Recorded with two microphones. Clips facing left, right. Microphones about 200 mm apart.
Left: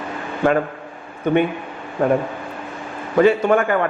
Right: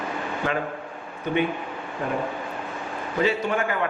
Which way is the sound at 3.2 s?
55° left (ahead or behind).